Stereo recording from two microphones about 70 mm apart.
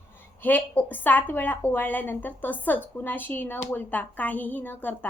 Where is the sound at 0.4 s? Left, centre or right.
Left.